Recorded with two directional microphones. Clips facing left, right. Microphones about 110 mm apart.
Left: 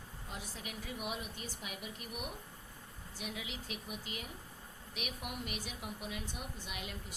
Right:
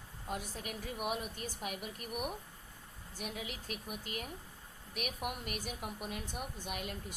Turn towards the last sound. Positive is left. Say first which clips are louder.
# right 3 dB
turn(degrees=-45)  # may be behind; listen again after turning